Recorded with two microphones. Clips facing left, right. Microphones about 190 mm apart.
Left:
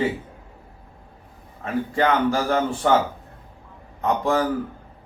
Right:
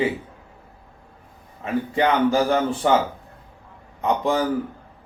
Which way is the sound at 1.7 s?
20° right (ahead or behind).